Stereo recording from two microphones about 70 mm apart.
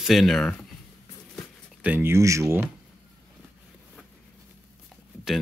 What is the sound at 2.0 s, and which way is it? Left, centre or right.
Speech, right.